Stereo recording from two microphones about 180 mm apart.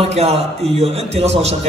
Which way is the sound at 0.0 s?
35° right (ahead or behind).